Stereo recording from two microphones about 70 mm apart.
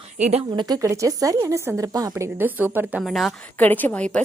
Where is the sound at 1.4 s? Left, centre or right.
Right.